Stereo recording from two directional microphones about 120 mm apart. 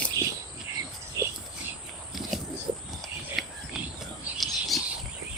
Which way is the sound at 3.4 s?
Centre (ahead or behind).